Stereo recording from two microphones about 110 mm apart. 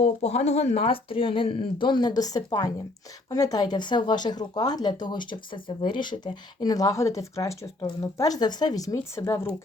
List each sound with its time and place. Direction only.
0.0 s speech: 80° left; by 9.5 s 25° left (ahead or behind)